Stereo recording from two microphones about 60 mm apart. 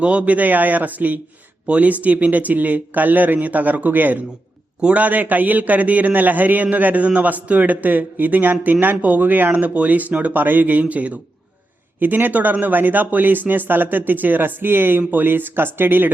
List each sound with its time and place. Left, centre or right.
0.0 s a man's voice: right